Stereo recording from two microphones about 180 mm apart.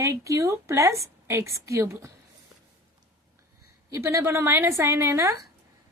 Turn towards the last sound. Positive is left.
turn(degrees=-15)  # may be behind; listen again after turning